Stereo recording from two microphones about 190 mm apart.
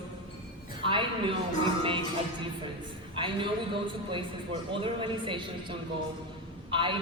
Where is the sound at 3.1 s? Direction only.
25° right (ahead or behind).